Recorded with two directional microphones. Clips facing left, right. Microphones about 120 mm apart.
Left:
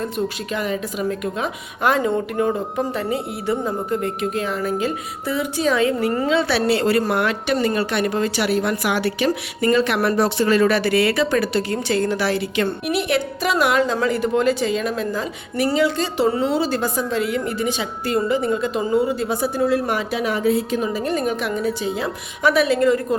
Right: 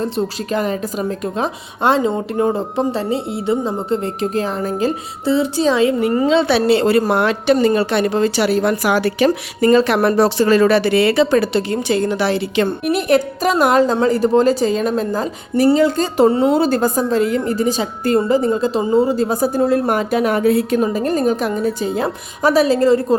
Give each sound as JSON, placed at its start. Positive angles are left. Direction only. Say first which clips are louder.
{"t": 0.0, "sound": "a woman's voice", "louder": "right 4 dB", "side_deg": -35}
{"t": 12.6, "sound": "a woman's voice", "louder": "right 4 dB", "side_deg": -45}
{"t": 20.8, "sound": "a woman's voice", "louder": "right 5 dB", "side_deg": -45}